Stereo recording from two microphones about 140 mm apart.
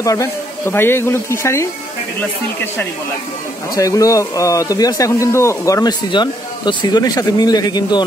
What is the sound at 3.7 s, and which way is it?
Speech, 25° left (ahead or behind).